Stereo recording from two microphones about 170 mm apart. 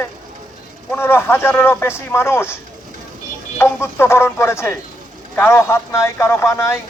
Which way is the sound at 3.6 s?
15° left (ahead or behind).